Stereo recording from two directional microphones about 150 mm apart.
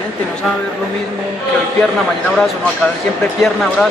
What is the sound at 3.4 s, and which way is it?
Speech, centre (ahead or behind).